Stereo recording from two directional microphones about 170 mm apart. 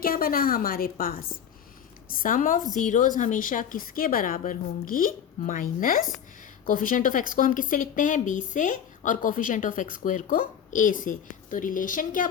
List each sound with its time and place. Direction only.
0.0 s a woman's voice: 60° left (ahead or behind)